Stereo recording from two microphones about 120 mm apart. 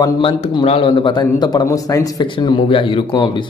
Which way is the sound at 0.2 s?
50° left (ahead or behind).